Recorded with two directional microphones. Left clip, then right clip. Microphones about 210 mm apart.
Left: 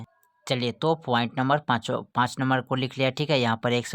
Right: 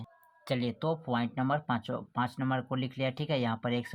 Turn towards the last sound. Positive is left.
turn(degrees=45)  # may be behind; listen again after turning